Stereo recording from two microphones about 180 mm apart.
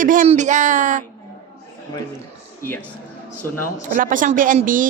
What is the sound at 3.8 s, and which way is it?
A woman's voice, 45° right (ahead or behind).